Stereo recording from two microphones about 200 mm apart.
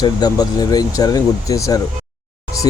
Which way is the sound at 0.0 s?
20° left (ahead or behind).